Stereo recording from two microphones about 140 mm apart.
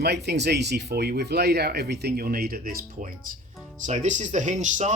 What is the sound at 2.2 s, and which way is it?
Speech, 90° right.